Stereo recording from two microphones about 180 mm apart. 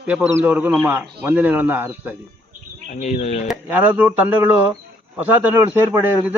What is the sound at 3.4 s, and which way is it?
A man's voice, 10° right (ahead or behind).